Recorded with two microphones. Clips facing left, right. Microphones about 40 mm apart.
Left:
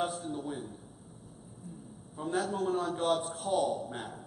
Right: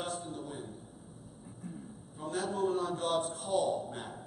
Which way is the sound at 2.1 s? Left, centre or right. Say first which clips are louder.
Left 4 dB; centre.